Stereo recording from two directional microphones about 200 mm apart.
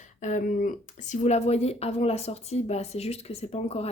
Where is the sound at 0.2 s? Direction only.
40° left (ahead or behind).